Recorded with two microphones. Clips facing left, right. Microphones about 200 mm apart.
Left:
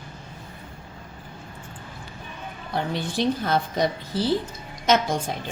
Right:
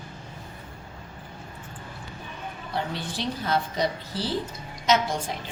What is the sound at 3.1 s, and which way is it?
A woman's voice, 50° left (ahead or behind).